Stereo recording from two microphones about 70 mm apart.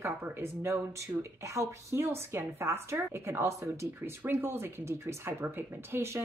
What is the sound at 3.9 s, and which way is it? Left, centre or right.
Speech, right.